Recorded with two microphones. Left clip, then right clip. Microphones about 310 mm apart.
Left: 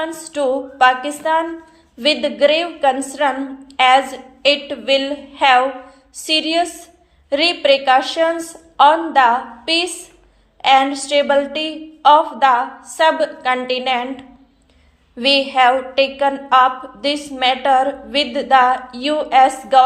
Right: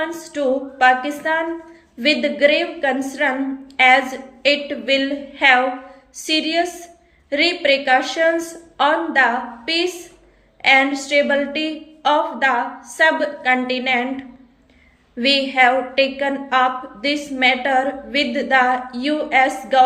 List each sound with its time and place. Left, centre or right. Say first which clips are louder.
0.0 s a woman's voice: left 2 dB; centre